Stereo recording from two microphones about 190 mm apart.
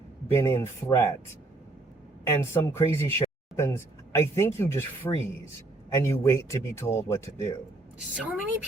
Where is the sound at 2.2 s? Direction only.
10° left (ahead or behind).